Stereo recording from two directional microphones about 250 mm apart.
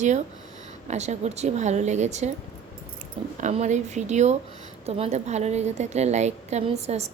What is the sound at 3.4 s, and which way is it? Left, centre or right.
Speech, right.